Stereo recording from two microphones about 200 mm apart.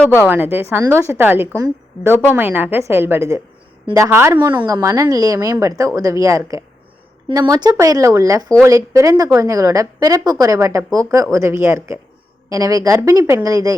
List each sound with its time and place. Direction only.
0.3 s a woman's voice: 10° right (ahead or behind)